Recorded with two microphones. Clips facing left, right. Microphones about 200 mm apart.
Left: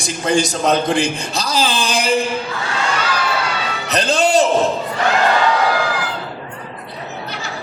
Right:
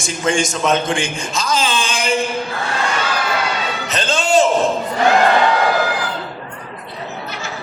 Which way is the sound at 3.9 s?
35° left (ahead or behind).